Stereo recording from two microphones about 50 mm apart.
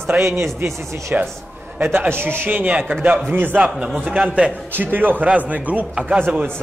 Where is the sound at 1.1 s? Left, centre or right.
Right.